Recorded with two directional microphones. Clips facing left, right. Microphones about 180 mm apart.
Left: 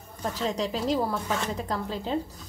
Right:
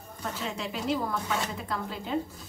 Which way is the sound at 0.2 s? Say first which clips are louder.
Left 6 dB; 35° left (ahead or behind).